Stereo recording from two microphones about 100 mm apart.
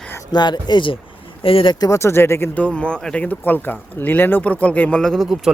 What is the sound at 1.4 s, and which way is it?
Speech, 65° left (ahead or behind).